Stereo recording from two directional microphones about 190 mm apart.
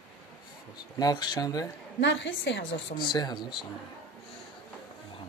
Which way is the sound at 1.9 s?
70° left (ahead or behind).